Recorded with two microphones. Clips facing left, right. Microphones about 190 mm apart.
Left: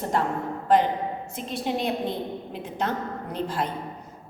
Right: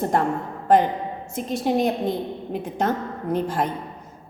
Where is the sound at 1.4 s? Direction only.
45° right (ahead or behind).